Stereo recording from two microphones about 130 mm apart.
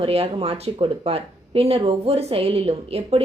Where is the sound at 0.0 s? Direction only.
50° right (ahead or behind).